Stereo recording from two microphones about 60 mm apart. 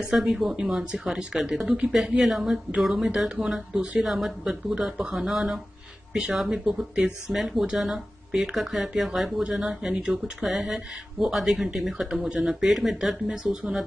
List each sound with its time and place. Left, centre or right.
0.1 s speech: centre
12.1 s speech: centre
12.4 s speech: centre